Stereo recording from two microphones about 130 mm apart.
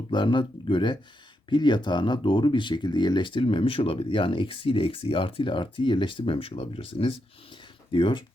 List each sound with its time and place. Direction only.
0.1 s speech: 35° left (ahead or behind)